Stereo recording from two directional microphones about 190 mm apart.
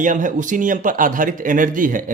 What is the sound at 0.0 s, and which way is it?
A man's voice, 40° right (ahead or behind).